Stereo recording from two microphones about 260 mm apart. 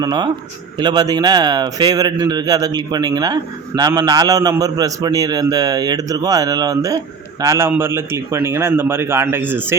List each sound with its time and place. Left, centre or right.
0.0 s a man's voice: centre